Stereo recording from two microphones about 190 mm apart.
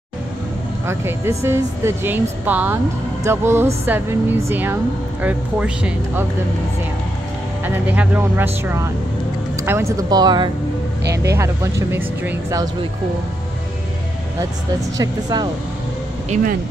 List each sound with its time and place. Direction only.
0.8 s speech: 15° right (ahead or behind)
7.6 s speech: 10° right (ahead or behind)
9.6 s speech: 15° right (ahead or behind)
15.0 s speech: 20° right (ahead or behind)